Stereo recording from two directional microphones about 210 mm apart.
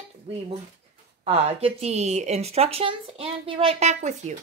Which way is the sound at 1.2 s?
30° right (ahead or behind).